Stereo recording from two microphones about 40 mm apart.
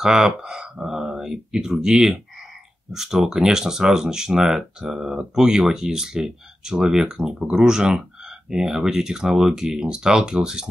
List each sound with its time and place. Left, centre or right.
0.0 s speech: centre